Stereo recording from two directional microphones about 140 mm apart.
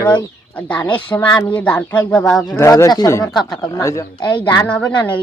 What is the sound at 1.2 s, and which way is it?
Speech, 30° left (ahead or behind).